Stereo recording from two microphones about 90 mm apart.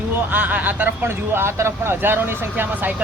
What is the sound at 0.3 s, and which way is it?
Speech, 20° right (ahead or behind).